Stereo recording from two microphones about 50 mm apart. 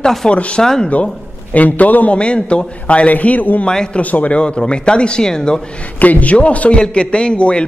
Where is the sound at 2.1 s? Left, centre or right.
Left.